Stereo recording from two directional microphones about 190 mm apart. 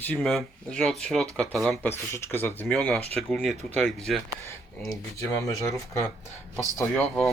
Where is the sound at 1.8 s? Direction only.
10° left (ahead or behind).